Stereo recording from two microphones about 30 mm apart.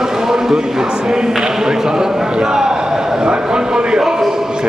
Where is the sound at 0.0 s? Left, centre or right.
Centre.